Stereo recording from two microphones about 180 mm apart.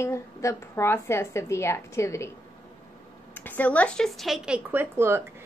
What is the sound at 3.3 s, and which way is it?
Speech, 10° left (ahead or behind).